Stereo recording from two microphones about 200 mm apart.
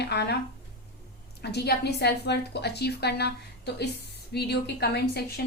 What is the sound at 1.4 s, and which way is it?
A woman's voice, 55° left (ahead or behind).